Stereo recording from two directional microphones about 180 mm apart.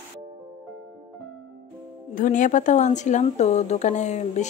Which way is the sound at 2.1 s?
45° left (ahead or behind).